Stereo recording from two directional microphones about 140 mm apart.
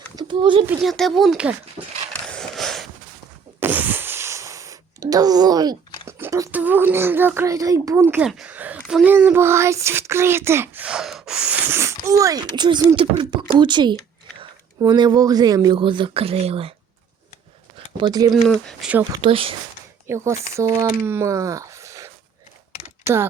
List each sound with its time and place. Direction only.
0.2 s a child's voice: 35° right (ahead or behind)
0.8 s speech: centre (ahead or behind)
2.2 s a sound: 5° left (ahead or behind)
3.6 s a sound: 10° right (ahead or behind)
6.5 s speech: 10° right (ahead or behind)
8.3 s a sound: 5° right (ahead or behind)
8.9 s speech: 5° right (ahead or behind)
9.1 s speech: 15° right (ahead or behind); by 16.7 s 45° right (ahead or behind)
17.9 s speech: 30° right (ahead or behind)
18.3 s speech: 5° left (ahead or behind)
19.1 s speech: 40° right (ahead or behind)
20.1 s speech: 20° right (ahead or behind)